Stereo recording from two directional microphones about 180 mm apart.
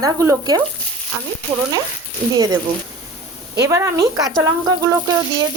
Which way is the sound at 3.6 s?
15° right (ahead or behind).